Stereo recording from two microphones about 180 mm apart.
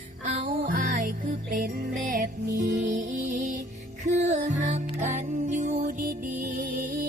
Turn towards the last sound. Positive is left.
turn(degrees=-45)  # may be behind; listen again after turning